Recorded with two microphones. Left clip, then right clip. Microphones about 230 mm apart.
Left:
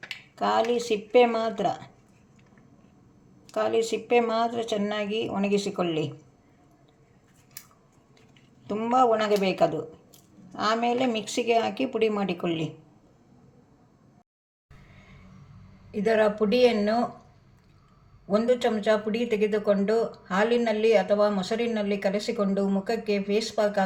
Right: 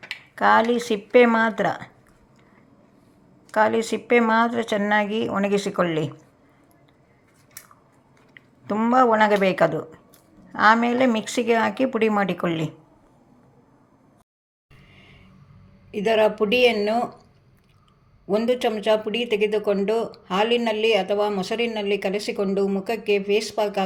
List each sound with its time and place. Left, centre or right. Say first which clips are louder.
0.3 s speech: right 6 dB; centre
3.5 s speech: right 5 dB; centre
8.6 s speech: right 4 dB; centre
15.9 s speech: right 3 dB; right
18.3 s speech: right 2 dB; right